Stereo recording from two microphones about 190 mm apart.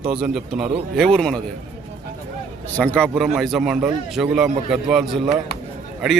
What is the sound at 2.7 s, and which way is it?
A man's voice, 5° left (ahead or behind).